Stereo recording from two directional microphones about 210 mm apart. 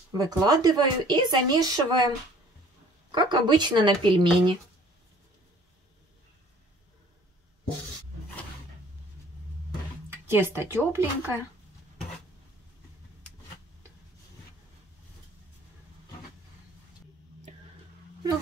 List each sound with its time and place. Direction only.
0.2 s speech: 20° right (ahead or behind)
10.0 s speech: 10° right (ahead or behind)